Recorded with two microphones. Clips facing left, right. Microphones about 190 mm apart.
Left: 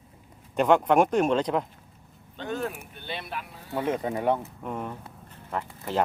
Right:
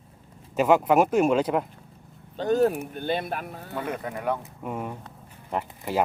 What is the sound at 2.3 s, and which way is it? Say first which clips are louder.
Speech: right 10 dB; 40° right (ahead or behind).